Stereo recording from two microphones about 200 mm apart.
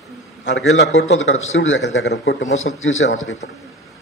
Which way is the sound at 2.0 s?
60° left (ahead or behind).